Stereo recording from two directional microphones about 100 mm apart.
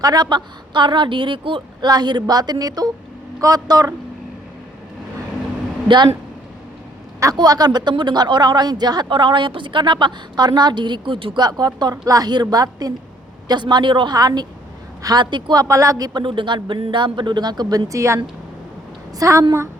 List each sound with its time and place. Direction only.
0.0 s speech: 40° right (ahead or behind)
1.9 s speech: 45° right (ahead or behind)
7.3 s speech: 40° right (ahead or behind)
15.6 s speech: 35° right (ahead or behind)
16.2 s speech: 55° right (ahead or behind); by 18.2 s 30° right (ahead or behind)
19.2 s speech: 35° right (ahead or behind)